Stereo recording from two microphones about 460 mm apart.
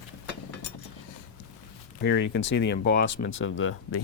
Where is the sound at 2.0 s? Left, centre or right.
Left.